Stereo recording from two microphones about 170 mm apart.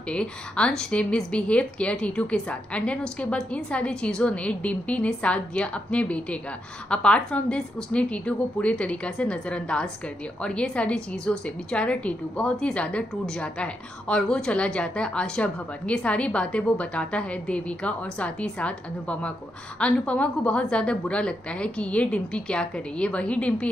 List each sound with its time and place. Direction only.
0.1 s a woman's voice: 5° left (ahead or behind)